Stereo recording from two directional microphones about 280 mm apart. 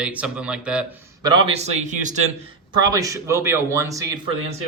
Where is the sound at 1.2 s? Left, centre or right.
Centre.